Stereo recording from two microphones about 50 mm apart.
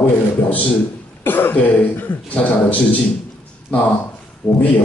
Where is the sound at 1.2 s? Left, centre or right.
Left.